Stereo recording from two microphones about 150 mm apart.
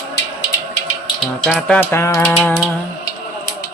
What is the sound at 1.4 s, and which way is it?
Speech, 5° left (ahead or behind).